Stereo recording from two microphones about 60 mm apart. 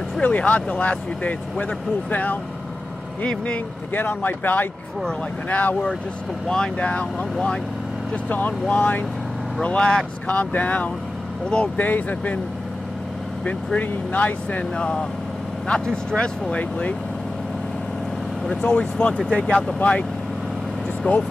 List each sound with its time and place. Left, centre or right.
0.2 s speech: left
3.9 s speech: left
6.4 s speech: centre; by 9.0 s left
9.6 s speech: centre
13.7 s speech: left
18.6 s speech: centre